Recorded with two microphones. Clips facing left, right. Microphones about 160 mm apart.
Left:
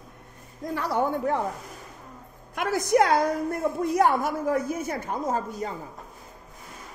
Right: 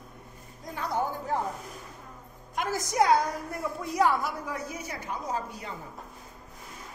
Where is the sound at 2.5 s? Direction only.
60° left (ahead or behind); by 5.7 s 45° left (ahead or behind).